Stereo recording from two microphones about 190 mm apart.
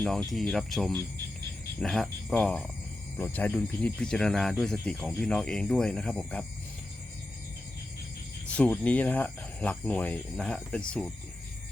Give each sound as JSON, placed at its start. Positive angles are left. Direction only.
{"t": 0.3, "sound": "speech", "side_deg": 0}
{"t": 8.5, "sound": "speech", "side_deg": 5}